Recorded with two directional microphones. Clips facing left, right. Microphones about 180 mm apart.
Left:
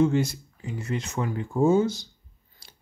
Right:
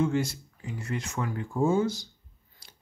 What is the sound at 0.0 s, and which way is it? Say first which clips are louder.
Speech: left 4 dB; 25° left (ahead or behind).